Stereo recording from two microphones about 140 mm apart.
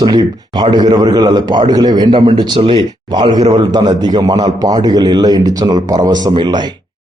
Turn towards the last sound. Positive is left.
turn(degrees=-30)  # may be behind; listen again after turning